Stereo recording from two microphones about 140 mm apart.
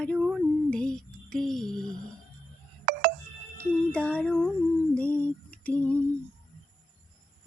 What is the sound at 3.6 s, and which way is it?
Speech, 10° left (ahead or behind).